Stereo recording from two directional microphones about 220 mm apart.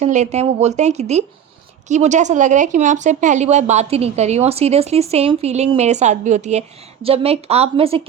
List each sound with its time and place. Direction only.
0.0 s speech: 30° right (ahead or behind)